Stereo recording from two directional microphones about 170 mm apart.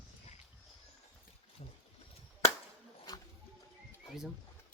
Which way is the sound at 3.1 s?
25° left (ahead or behind).